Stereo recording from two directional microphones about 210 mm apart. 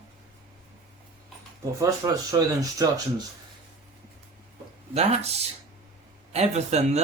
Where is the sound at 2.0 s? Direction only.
15° right (ahead or behind).